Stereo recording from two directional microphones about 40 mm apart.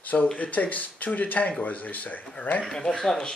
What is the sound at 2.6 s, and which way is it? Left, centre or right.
Speech, centre.